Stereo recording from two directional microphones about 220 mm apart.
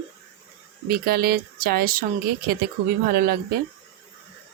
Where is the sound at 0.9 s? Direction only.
45° right (ahead or behind).